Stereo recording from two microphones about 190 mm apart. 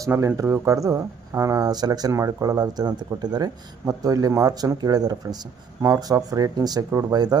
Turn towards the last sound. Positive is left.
turn(degrees=-20)  # may be behind; listen again after turning